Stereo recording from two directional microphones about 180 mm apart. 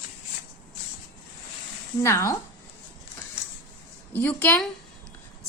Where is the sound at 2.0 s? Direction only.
15° left (ahead or behind).